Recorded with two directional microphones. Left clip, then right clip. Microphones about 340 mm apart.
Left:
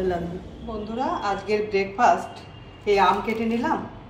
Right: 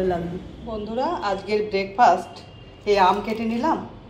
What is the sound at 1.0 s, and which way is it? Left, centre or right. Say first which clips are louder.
A woman's voice: right 1 dB; centre.